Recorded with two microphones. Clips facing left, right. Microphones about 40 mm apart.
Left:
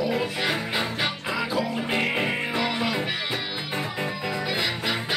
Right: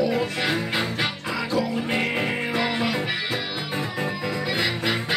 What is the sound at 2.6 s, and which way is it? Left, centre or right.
Music, centre.